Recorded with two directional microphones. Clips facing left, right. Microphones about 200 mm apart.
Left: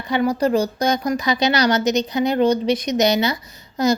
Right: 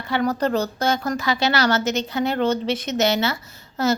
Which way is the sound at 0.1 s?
10° left (ahead or behind).